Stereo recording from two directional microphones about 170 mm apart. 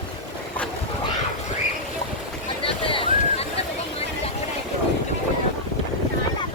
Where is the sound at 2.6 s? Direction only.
30° left (ahead or behind).